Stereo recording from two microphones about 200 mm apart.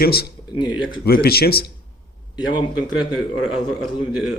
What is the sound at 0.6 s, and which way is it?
Speech, 20° left (ahead or behind).